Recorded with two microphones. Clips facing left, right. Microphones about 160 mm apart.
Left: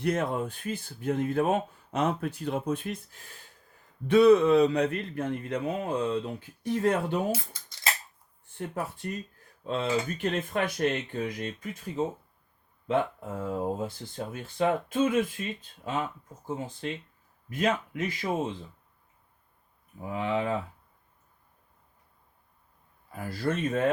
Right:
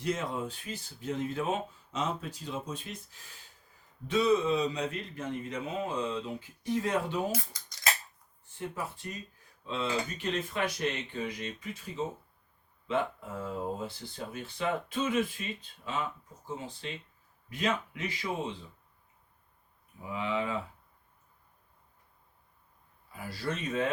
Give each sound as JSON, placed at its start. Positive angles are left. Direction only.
{"t": 0.0, "sound": "speech", "side_deg": 55}
{"t": 8.5, "sound": "speech", "side_deg": 55}
{"t": 13.1, "sound": "speech", "side_deg": 45}
{"t": 20.0, "sound": "speech", "side_deg": 45}
{"t": 23.1, "sound": "speech", "side_deg": 50}